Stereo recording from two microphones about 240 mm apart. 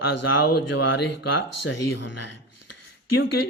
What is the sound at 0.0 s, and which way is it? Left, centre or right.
Speech, left.